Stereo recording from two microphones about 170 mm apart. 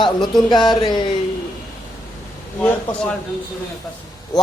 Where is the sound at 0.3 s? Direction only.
25° left (ahead or behind).